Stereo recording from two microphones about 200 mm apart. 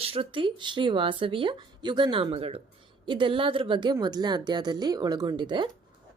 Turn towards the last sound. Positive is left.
turn(degrees=-25)  # may be behind; listen again after turning